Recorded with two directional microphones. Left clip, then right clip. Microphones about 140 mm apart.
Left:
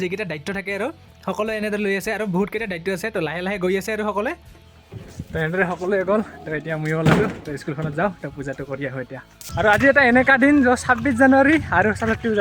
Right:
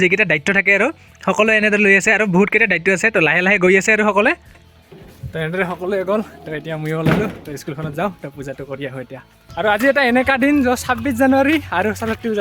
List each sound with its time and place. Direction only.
0.0 s speech: 30° right (ahead or behind)
5.3 s speech: 15° right (ahead or behind)